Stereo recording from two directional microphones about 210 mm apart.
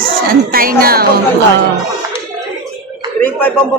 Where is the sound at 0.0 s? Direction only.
45° right (ahead or behind).